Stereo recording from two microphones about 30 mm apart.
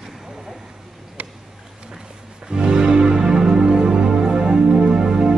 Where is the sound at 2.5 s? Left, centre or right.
Right.